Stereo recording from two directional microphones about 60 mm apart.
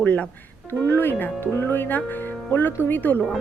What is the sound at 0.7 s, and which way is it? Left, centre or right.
Speech, left.